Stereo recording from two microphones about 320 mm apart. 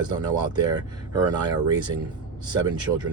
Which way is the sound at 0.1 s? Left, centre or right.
Centre.